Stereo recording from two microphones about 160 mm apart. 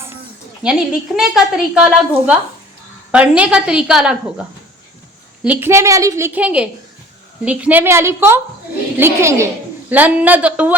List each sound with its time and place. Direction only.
0.6 s a woman's voice: 5° right (ahead or behind)
5.4 s a woman's voice: 10° right (ahead or behind)